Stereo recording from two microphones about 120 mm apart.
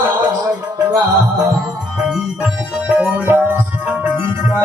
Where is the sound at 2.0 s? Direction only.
5° right (ahead or behind).